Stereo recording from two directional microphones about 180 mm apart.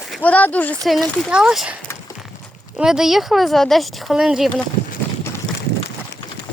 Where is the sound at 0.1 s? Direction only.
10° left (ahead or behind).